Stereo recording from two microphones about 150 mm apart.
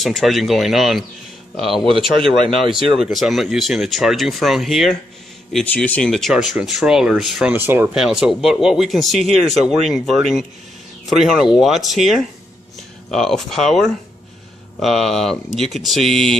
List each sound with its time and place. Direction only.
0.0 s speech: centre (ahead or behind)
7.5 s speech: 15° right (ahead or behind)
8.0 s speech: 5° right (ahead or behind)